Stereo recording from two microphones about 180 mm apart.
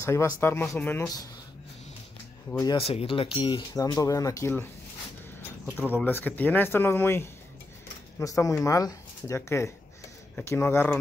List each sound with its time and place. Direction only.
0.0 s speech: 15° left (ahead or behind)
2.6 s speech: 30° left (ahead or behind)
5.8 s speech: 10° left (ahead or behind)